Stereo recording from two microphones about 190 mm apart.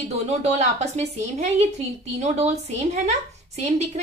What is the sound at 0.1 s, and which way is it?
A woman's voice, 35° right (ahead or behind).